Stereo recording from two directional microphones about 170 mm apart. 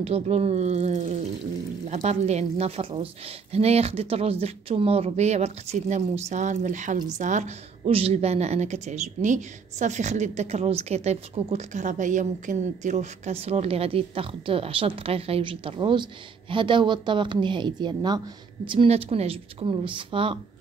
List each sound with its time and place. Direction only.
0.0 s a woman's voice: 35° right (ahead or behind)